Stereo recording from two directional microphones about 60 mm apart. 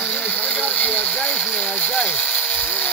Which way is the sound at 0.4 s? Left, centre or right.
Left.